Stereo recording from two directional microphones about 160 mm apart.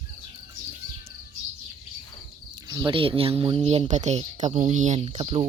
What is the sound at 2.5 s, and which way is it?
Speech, 25° right (ahead or behind).